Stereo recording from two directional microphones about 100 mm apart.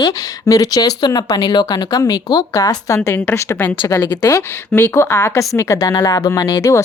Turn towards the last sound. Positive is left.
turn(degrees=30)  # may be behind; listen again after turning